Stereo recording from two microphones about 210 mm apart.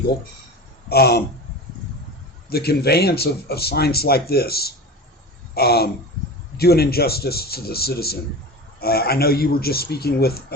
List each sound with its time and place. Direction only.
0.9 s speech: 50° left (ahead or behind)
2.5 s speech: 50° left (ahead or behind)